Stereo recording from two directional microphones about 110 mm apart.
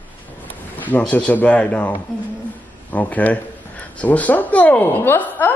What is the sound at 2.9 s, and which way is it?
A man's voice, 15° left (ahead or behind).